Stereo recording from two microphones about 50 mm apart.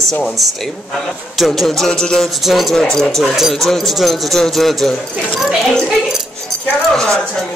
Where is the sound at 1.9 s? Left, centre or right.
Centre.